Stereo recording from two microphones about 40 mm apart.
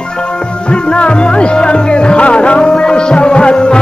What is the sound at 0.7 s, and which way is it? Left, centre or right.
Music, left.